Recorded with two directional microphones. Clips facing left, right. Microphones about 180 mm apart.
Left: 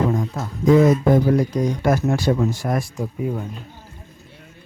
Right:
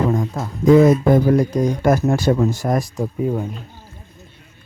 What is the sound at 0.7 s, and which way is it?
Speech, 55° right (ahead or behind).